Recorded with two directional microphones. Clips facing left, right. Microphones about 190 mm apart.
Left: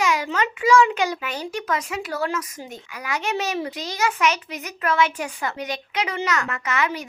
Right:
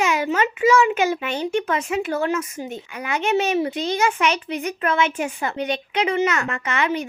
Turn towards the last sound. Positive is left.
turn(degrees=-25)  # may be behind; listen again after turning